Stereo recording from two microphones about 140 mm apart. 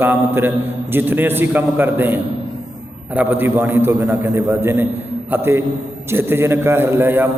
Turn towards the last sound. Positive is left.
turn(degrees=-15)  # may be behind; listen again after turning